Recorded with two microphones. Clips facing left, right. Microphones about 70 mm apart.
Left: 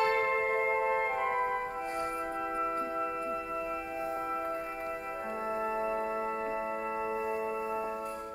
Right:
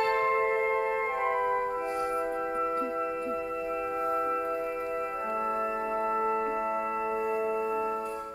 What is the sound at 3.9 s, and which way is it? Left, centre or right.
Singing bowl, right.